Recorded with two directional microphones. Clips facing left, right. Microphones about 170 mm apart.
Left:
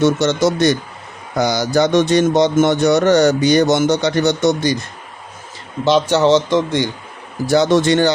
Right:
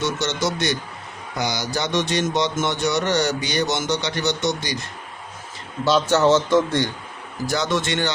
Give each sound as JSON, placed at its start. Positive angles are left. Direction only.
{"t": 0.0, "sound": "speech", "side_deg": 50}
{"t": 5.8, "sound": "speech", "side_deg": 15}
{"t": 7.4, "sound": "speech", "side_deg": 30}